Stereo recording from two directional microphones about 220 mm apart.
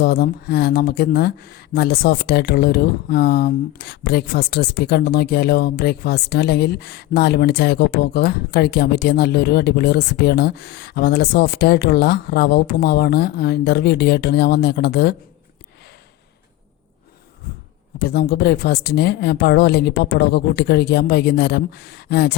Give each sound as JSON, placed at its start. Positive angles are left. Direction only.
{"t": 0.0, "sound": "speech", "side_deg": 45}
{"t": 18.0, "sound": "speech", "side_deg": 45}